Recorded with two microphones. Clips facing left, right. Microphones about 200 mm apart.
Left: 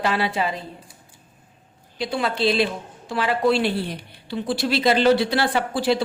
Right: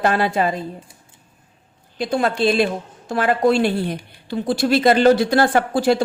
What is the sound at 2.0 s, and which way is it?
A woman's voice, 45° right (ahead or behind).